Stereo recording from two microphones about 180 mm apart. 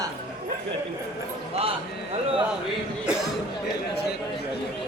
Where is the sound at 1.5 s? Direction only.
35° right (ahead or behind).